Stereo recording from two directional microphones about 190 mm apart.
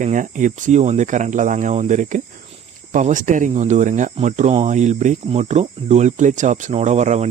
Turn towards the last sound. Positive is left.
turn(degrees=-35)  # may be behind; listen again after turning